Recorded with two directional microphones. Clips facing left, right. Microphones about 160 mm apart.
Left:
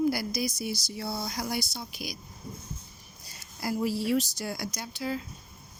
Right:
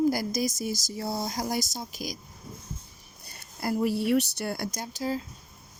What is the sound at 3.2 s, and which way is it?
Speech, 55° right (ahead or behind).